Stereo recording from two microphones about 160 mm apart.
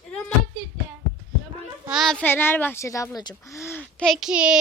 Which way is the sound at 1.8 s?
Centre (ahead or behind).